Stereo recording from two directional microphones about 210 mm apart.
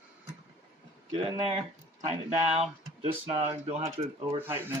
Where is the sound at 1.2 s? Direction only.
25° right (ahead or behind).